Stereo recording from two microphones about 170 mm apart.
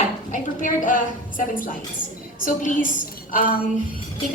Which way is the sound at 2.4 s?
55° left (ahead or behind).